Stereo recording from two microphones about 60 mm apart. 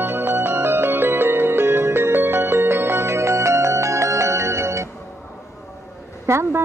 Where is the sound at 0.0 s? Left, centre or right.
Right.